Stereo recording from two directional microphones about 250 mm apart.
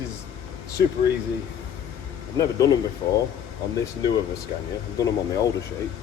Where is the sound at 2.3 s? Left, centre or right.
Centre.